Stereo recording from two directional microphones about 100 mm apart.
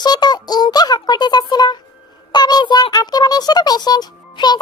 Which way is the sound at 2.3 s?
45° left (ahead or behind).